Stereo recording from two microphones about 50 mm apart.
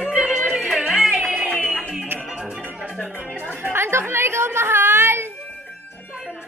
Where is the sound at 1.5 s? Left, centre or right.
Right.